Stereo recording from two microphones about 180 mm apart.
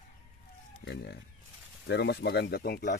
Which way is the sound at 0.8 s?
70° left (ahead or behind).